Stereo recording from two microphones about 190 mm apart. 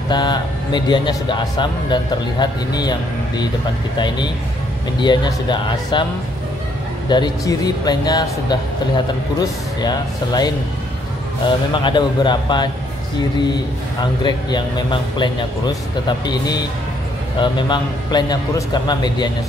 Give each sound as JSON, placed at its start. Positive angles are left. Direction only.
{"t": 0.1, "sound": "speech", "side_deg": 25}
{"t": 5.0, "sound": "speech", "side_deg": 25}
{"t": 7.1, "sound": "speech", "side_deg": 20}
{"t": 14.2, "sound": "speech", "side_deg": 25}